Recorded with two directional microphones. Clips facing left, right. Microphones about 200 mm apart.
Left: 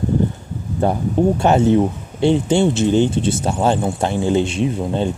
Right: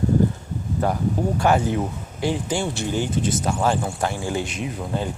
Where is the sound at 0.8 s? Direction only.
30° left (ahead or behind).